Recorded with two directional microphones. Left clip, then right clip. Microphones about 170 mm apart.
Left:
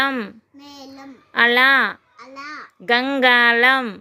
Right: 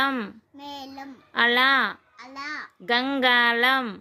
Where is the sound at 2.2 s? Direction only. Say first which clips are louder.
Even; centre (ahead or behind).